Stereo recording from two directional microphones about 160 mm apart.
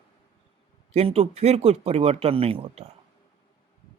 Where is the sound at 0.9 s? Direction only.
40° right (ahead or behind).